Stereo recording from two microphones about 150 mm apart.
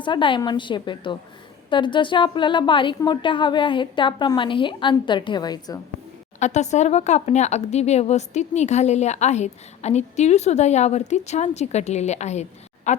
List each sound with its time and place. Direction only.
0.0 s a woman's voice: 35° left (ahead or behind)
6.4 s speech: 50° left (ahead or behind)